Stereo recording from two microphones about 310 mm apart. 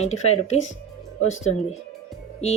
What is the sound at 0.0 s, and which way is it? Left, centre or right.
Speech, left.